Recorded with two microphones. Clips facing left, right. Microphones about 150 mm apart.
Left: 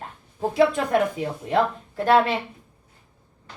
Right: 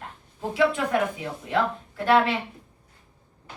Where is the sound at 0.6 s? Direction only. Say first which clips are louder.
Left 3 dB; 40° left (ahead or behind).